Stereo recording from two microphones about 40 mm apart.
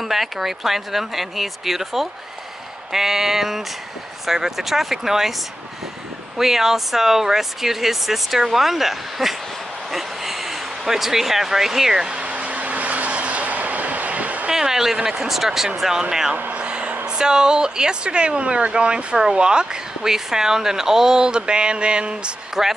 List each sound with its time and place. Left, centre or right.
0.1 s speech: centre
6.3 s speech: centre
10.9 s speech: centre
12.2 s vehicle: right
14.5 s speech: centre
16.5 s a sound: right
17.2 s speech: centre
22.6 s speech: centre